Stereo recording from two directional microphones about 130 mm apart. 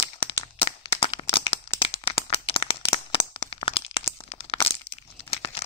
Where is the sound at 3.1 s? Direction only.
45° left (ahead or behind).